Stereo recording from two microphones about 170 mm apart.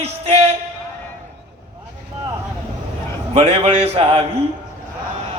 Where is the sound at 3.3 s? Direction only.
35° right (ahead or behind).